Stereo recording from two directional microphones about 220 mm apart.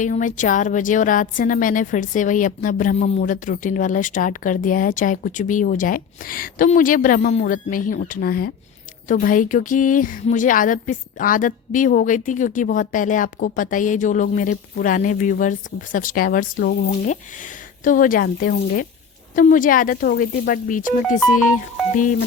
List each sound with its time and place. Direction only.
0.0 s a woman's voice: 35° left (ahead or behind)